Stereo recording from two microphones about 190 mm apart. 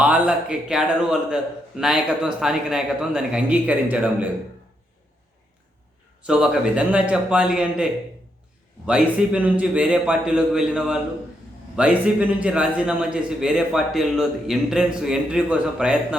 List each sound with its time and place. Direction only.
0.0 s a man's voice: 5° right (ahead or behind)
6.2 s a man's voice: 5° right (ahead or behind)
8.9 s a man's voice: 5° right (ahead or behind)